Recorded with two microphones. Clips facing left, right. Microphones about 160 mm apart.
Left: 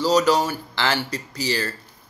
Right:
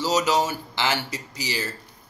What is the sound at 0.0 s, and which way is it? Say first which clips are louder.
Speech: left 4 dB; 20° right (ahead or behind).